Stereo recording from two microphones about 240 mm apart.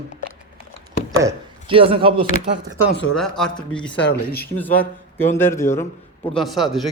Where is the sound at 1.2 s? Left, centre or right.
Centre.